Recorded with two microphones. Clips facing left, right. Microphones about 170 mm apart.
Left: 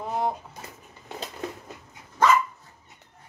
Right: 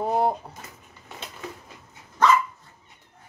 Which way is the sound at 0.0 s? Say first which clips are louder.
Right 5 dB; 35° right (ahead or behind).